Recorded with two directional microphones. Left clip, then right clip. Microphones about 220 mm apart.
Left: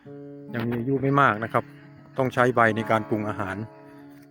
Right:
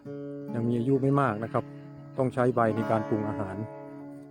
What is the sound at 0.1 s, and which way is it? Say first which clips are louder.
Music: right 3 dB; 40° right (ahead or behind).